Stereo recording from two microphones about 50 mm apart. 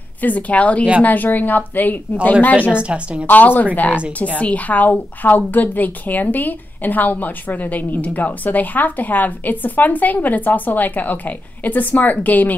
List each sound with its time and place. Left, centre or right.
0.2 s a woman's voice: left
2.7 s a woman's voice: right
3.3 s a woman's voice: left